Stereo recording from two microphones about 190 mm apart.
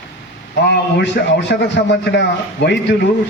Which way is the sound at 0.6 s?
60° left (ahead or behind).